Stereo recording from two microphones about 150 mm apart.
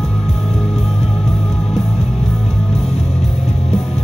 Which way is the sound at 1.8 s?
45° left (ahead or behind).